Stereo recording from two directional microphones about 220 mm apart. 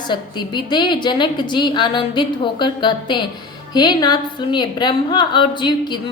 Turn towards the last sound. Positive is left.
turn(degrees=20)  # may be behind; listen again after turning